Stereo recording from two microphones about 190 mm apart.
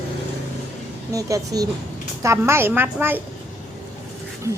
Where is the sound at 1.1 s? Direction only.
20° right (ahead or behind).